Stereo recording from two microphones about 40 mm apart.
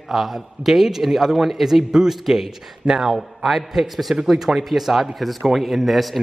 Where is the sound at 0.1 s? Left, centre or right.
Centre.